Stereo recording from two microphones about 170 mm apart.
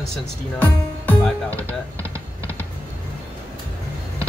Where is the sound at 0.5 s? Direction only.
10° left (ahead or behind).